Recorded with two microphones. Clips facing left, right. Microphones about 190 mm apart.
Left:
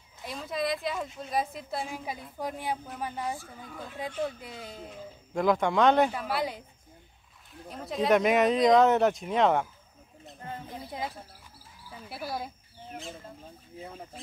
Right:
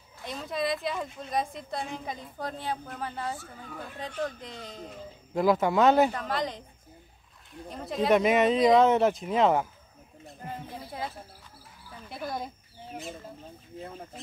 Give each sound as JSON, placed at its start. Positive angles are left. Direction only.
{"t": 0.2, "sound": "a woman's voice", "side_deg": 0}
{"t": 5.3, "sound": "a woman's voice", "side_deg": -5}
{"t": 6.1, "sound": "speech", "side_deg": 10}
{"t": 7.6, "sound": "a woman's voice", "side_deg": 0}
{"t": 10.7, "sound": "speech", "side_deg": 15}
{"t": 12.1, "sound": "a woman's voice", "side_deg": 5}
{"t": 13.7, "sound": "a woman's voice", "side_deg": 5}